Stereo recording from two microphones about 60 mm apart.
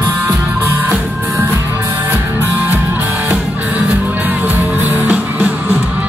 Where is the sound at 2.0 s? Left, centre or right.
Right.